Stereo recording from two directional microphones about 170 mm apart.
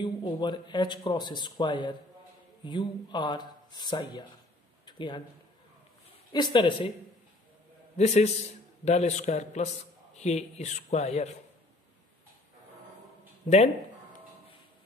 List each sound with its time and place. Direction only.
0.0 s speech: 25° left (ahead or behind)
4.8 s a sound: 25° left (ahead or behind)
6.3 s speech: 25° left (ahead or behind)
8.0 s speech: 40° left (ahead or behind)